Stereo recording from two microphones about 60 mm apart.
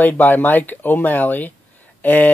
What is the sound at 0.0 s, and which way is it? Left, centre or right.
Speech, left.